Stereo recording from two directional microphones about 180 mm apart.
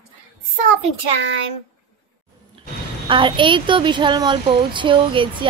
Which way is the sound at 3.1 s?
25° right (ahead or behind).